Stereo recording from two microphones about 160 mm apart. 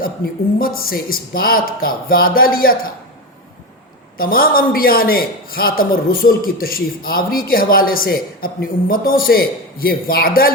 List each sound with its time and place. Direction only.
0.6 s speech: 65° left (ahead or behind)
4.2 s speech: 65° left (ahead or behind)